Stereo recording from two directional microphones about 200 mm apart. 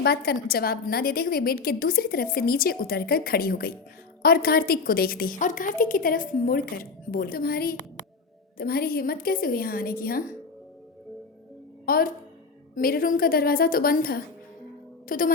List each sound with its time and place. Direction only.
0.0 s a woman's voice: 55° left (ahead or behind)
11.9 s a woman's voice: 50° left (ahead or behind)